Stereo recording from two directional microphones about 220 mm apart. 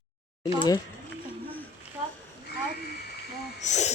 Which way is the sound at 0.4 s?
20° left (ahead or behind).